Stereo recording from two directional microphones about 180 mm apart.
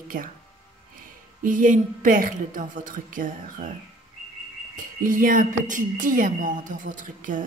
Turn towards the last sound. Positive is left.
turn(degrees=-45)  # may be behind; listen again after turning